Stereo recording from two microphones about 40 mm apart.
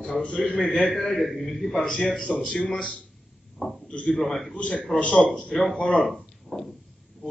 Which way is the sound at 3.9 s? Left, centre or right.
Left.